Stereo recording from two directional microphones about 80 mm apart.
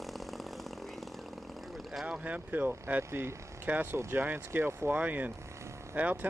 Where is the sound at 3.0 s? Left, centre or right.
Right.